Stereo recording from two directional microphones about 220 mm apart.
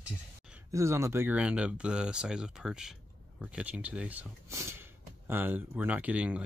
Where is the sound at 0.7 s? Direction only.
15° right (ahead or behind).